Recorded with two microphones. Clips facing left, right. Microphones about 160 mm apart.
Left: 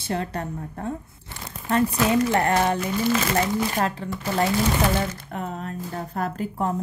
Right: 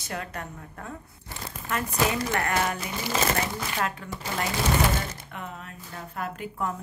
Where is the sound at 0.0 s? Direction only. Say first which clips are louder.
Left 7 dB; 30° left (ahead or behind).